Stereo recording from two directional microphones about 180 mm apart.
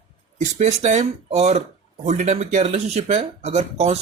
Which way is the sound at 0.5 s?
40° right (ahead or behind).